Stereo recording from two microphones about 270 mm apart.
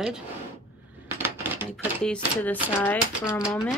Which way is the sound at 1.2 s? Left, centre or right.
Centre.